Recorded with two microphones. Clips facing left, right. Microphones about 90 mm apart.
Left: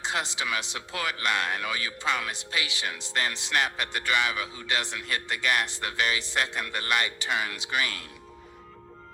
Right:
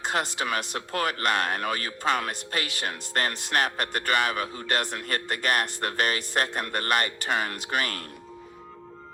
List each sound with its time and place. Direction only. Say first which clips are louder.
0.0 s speech: right 3 dB; 50° right (ahead or behind)